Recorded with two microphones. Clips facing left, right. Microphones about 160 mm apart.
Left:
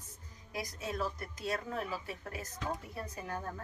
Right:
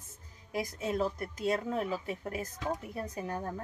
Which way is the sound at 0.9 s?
20° right (ahead or behind).